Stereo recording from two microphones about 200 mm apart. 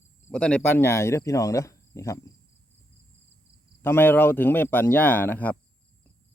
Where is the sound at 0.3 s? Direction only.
5° left (ahead or behind).